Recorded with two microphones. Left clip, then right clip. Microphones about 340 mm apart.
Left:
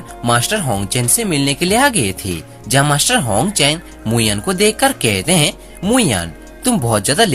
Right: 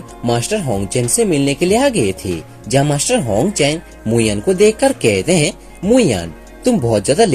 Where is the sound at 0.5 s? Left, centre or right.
Left.